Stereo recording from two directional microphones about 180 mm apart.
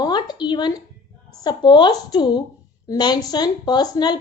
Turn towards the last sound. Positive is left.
turn(degrees=20)  # may be behind; listen again after turning